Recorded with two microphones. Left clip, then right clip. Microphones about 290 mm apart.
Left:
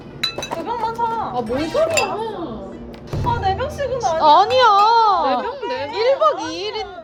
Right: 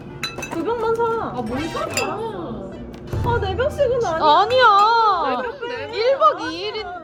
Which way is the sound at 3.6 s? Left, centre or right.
Right.